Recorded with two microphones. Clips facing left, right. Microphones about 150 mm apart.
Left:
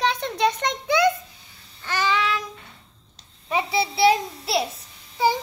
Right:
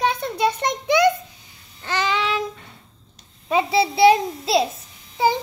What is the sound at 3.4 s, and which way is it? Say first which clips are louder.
A child's voice: right 5 dB; 25° right (ahead or behind).